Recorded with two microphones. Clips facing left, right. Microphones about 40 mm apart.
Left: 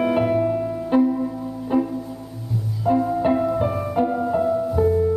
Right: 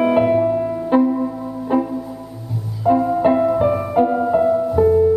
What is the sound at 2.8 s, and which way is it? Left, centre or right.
Music, centre.